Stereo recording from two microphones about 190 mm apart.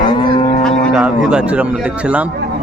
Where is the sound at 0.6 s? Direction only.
Centre (ahead or behind).